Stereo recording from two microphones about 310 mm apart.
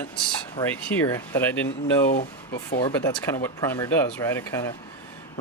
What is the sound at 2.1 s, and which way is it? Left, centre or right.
Speech, left.